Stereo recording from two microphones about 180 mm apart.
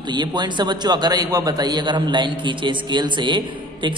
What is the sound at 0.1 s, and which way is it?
A man's voice, 25° right (ahead or behind).